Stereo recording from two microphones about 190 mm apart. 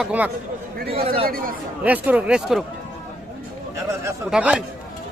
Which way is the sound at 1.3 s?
50° right (ahead or behind).